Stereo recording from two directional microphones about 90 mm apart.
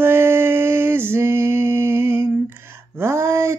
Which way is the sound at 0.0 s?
25° right (ahead or behind).